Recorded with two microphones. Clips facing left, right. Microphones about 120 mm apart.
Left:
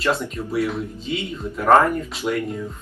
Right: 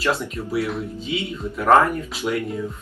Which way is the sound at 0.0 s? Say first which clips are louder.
Left 1 dB; centre (ahead or behind).